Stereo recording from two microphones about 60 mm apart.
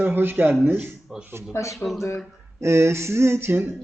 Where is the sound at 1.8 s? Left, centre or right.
Left.